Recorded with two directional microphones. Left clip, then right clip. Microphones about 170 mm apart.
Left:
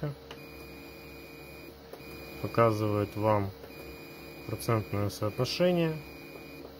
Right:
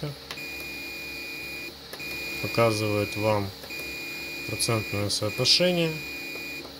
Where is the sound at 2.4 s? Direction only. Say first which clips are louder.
Right 2 dB; centre (ahead or behind).